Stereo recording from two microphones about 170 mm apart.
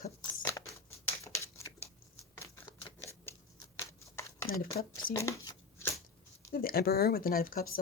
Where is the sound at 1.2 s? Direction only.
15° left (ahead or behind).